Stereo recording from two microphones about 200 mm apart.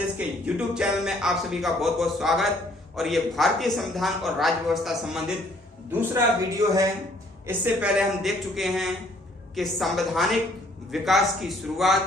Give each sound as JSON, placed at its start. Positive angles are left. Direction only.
{"t": 0.4, "sound": "a man's voice", "side_deg": -5}
{"t": 5.9, "sound": "a man's voice", "side_deg": -15}